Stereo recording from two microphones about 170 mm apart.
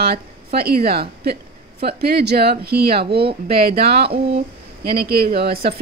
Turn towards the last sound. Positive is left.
turn(degrees=-65)  # may be behind; listen again after turning